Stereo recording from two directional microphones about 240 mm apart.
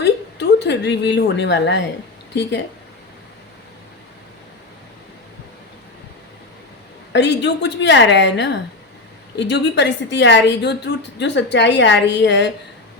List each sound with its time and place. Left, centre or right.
0.0 s a sound: left
2.3 s a woman's voice: left
7.1 s a woman's voice: left